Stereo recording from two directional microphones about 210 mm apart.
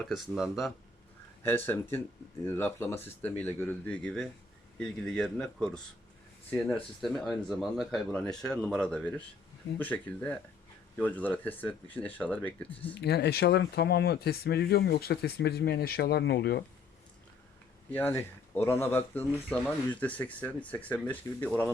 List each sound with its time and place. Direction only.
0.0 s speech: centre (ahead or behind)
1.5 s speech: 10° left (ahead or behind)
12.9 s speech: 50° left (ahead or behind)
17.9 s speech: 10° left (ahead or behind)